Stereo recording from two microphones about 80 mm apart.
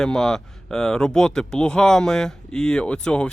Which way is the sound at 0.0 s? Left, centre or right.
Centre.